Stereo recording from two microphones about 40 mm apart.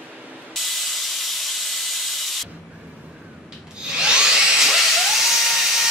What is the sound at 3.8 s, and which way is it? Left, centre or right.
Dental drill, right.